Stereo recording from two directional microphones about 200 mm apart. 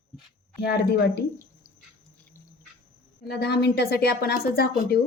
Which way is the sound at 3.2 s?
55° left (ahead or behind).